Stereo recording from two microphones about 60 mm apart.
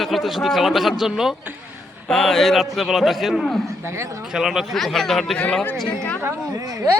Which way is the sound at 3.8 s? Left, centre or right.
Right.